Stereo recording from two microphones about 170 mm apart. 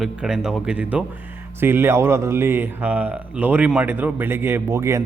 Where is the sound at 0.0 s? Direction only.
5° right (ahead or behind).